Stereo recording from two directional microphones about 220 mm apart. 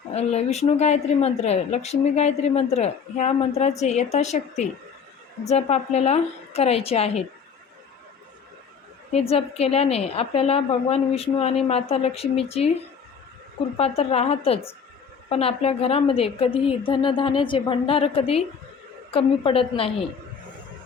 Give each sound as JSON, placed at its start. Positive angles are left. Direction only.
{"t": 0.1, "sound": "a woman's voice", "side_deg": 30}
{"t": 9.3, "sound": "a woman's voice", "side_deg": 30}
{"t": 13.7, "sound": "a woman's voice", "side_deg": 25}